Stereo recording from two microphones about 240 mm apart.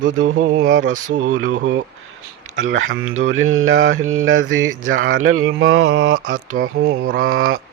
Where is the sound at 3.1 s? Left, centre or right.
Right.